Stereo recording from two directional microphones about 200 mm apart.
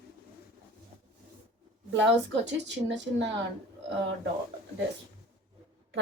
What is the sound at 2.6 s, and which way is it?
Speech, 60° right (ahead or behind).